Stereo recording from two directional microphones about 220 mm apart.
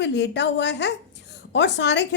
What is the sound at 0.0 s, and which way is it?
A woman's voice, 50° left (ahead or behind).